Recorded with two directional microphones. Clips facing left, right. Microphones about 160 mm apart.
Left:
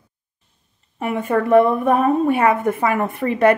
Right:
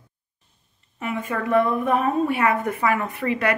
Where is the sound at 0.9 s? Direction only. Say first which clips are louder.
Left 7 dB; 55° left (ahead or behind).